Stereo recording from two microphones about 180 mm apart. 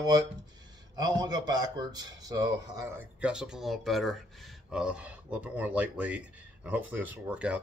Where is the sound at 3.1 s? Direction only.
5° right (ahead or behind).